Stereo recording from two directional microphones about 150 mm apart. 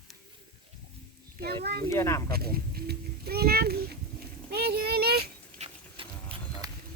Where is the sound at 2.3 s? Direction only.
90° right.